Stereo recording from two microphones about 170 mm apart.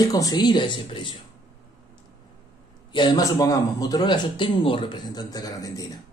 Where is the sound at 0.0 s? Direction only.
20° left (ahead or behind).